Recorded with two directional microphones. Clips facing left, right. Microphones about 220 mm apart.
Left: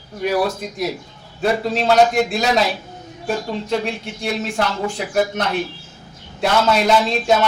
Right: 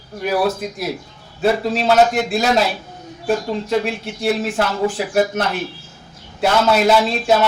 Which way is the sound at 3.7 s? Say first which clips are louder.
Right 3 dB; 5° right (ahead or behind).